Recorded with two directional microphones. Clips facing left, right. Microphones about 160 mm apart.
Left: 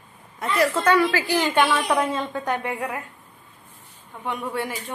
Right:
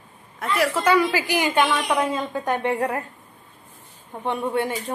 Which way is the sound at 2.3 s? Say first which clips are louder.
Right 3 dB; 20° right (ahead or behind).